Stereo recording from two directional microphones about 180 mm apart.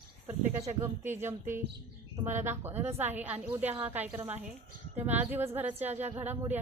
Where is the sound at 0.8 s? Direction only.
15° right (ahead or behind).